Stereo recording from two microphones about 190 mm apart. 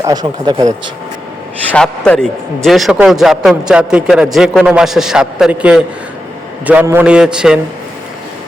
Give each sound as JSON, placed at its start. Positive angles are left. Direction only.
{"t": 0.0, "sound": "speech", "side_deg": -20}
{"t": 1.7, "sound": "a man's voice", "side_deg": 5}